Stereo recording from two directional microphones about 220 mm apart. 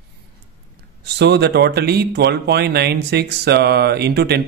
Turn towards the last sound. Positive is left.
turn(degrees=-50)  # may be behind; listen again after turning